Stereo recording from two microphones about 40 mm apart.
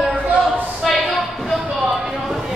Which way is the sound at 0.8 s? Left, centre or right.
Centre.